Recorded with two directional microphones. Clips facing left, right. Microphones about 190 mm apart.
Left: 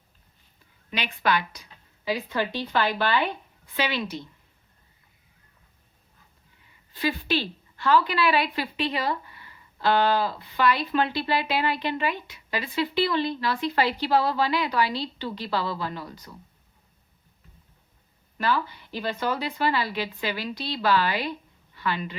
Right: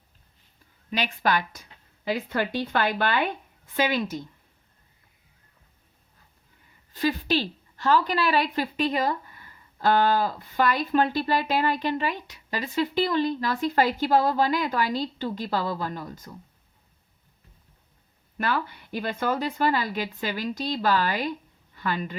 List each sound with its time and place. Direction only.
0.9 s a woman's voice: 45° right (ahead or behind)
6.9 s a woman's voice: 40° right (ahead or behind)
18.3 s a woman's voice: 50° right (ahead or behind)